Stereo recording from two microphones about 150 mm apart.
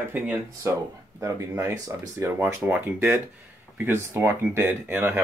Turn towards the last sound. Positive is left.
turn(degrees=-15)  # may be behind; listen again after turning